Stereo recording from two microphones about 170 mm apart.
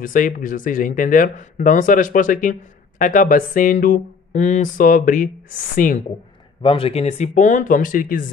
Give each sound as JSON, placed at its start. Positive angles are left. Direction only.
{"t": 0.0, "sound": "speech", "side_deg": 50}
{"t": 6.6, "sound": "speech", "side_deg": 30}